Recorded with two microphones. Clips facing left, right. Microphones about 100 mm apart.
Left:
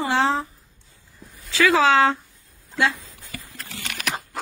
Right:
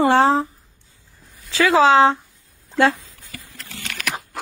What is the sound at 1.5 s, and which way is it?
Speech, 25° right (ahead or behind).